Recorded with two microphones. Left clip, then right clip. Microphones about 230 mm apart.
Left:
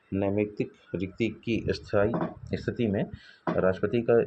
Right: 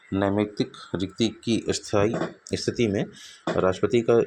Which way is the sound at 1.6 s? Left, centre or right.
Right.